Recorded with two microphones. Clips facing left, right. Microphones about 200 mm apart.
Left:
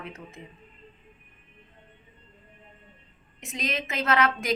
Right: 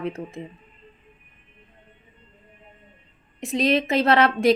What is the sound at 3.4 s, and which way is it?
Speech, 35° right (ahead or behind).